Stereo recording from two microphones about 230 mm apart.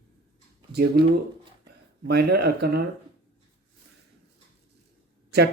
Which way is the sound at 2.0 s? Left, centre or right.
Right.